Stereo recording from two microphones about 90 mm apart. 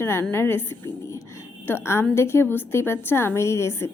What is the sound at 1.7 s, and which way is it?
A woman's voice, 30° left (ahead or behind).